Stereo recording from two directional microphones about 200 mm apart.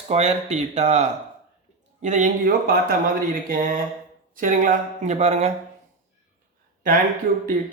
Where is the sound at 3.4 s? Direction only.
45° right (ahead or behind).